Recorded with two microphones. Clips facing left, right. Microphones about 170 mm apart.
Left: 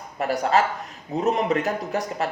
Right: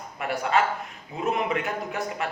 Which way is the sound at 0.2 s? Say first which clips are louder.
Left 3 dB; 40° left (ahead or behind).